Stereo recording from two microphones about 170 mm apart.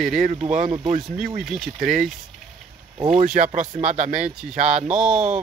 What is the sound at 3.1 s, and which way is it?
Speech, 45° right (ahead or behind).